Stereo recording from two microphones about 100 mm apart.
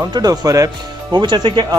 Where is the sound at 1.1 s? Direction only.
50° right (ahead or behind).